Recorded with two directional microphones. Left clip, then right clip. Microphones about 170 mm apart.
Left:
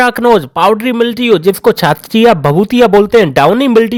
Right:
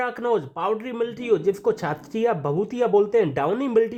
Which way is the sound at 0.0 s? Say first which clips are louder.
Left 15 dB; 50° left (ahead or behind).